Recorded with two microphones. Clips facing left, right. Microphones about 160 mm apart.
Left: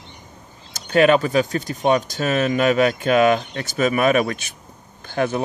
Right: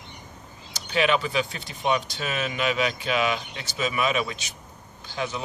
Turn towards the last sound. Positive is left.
turn(degrees=55)  # may be behind; listen again after turning